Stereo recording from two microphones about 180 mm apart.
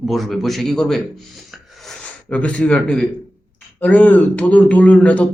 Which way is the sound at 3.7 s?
10° left (ahead or behind).